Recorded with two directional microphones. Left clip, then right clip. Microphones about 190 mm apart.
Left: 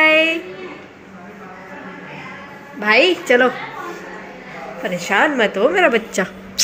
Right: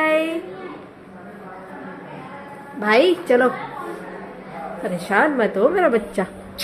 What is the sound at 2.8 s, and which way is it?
Speech, 15° right (ahead or behind).